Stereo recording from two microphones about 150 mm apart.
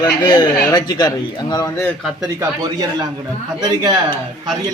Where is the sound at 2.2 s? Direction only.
25° right (ahead or behind).